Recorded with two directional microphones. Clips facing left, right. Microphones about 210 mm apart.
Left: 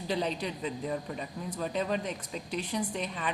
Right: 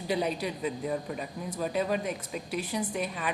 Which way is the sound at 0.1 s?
10° right (ahead or behind).